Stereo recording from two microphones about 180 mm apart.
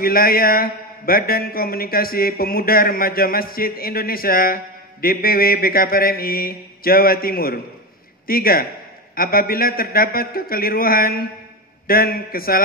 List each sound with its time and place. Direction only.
0.0 s speech: 55° left (ahead or behind)